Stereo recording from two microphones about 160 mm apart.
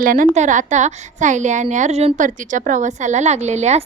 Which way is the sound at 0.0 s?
60° right (ahead or behind).